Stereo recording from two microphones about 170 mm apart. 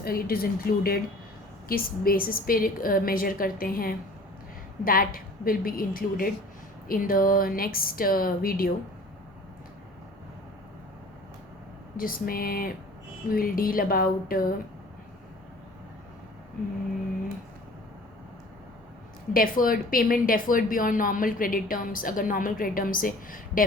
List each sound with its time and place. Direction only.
0.0 s a woman's voice: 60° left (ahead or behind)
11.9 s a woman's voice: 55° left (ahead or behind)
19.3 s a woman's voice: 55° left (ahead or behind)